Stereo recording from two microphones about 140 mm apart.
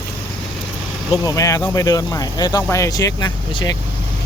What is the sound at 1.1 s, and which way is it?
Speech, 25° left (ahead or behind).